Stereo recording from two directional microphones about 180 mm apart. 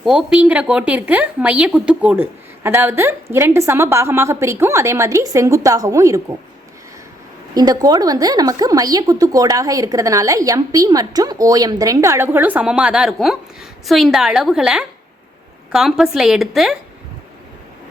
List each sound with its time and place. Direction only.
0.0 s a woman's voice: 5° right (ahead or behind)
7.5 s a woman's voice: 20° right (ahead or behind); by 16.5 s centre (ahead or behind)